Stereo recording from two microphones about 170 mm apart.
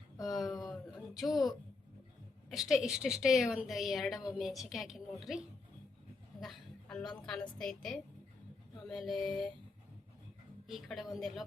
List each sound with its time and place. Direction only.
0.2 s a sound: centre (ahead or behind)
2.5 s a woman's voice: centre (ahead or behind)
6.4 s chuckle: centre (ahead or behind)
7.0 s a woman's voice: 25° left (ahead or behind)
7.3 s a woman's voice: 5° left (ahead or behind)
10.7 s a woman's voice: centre (ahead or behind)